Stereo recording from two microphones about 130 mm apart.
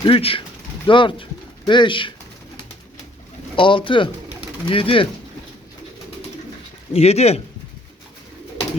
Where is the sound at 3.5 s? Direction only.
40° left (ahead or behind).